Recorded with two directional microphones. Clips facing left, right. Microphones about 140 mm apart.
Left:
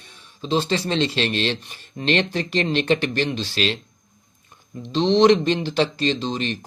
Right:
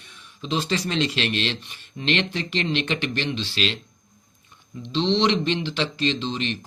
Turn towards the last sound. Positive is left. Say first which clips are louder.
# left 2 dB
turn(degrees=40)  # may be behind; listen again after turning